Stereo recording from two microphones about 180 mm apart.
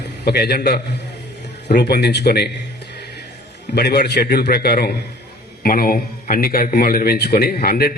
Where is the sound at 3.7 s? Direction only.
65° left (ahead or behind).